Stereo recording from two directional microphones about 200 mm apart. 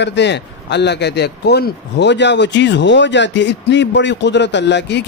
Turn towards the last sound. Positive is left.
turn(degrees=60)  # may be behind; listen again after turning